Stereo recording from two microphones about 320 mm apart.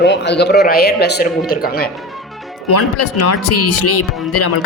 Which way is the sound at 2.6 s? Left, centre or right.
Left.